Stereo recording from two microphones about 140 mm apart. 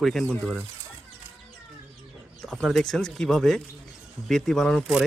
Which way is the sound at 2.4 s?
Centre (ahead or behind).